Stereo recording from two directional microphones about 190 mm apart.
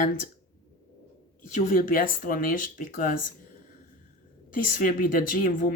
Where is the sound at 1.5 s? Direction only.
45° left (ahead or behind).